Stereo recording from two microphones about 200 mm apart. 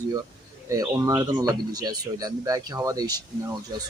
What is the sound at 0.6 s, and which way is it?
Speech, 15° right (ahead or behind).